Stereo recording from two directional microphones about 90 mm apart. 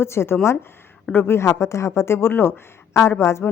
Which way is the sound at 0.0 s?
30° left (ahead or behind).